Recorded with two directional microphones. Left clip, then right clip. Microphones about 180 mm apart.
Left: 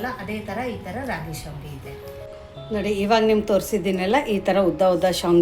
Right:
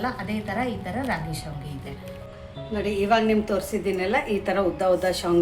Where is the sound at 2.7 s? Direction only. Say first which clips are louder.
Left 2 dB; 40° left (ahead or behind).